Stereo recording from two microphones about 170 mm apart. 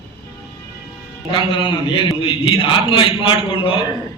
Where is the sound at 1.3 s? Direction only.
30° left (ahead or behind).